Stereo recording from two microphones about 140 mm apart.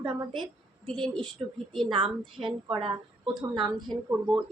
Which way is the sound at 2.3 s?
35° right (ahead or behind).